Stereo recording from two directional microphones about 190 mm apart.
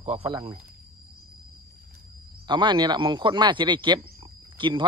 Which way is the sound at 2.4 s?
25° right (ahead or behind).